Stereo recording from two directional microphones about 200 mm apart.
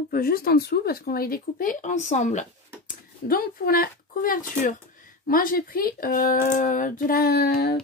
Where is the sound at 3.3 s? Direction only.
45° left (ahead or behind).